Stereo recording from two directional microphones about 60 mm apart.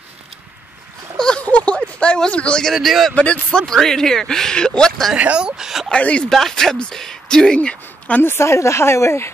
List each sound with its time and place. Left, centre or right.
1.1 s a sound: centre
1.4 s a sound: left
2.7 s speech: centre
3.2 s a man's voice: left
3.6 s speech: centre
5.1 s speech: right
5.9 s speech: centre
6.2 s speech: centre
8.2 s speech: left